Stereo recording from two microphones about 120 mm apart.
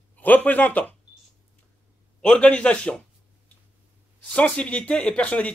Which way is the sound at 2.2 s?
10° left (ahead or behind).